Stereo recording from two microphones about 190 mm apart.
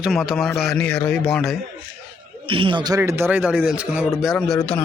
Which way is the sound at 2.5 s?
25° right (ahead or behind).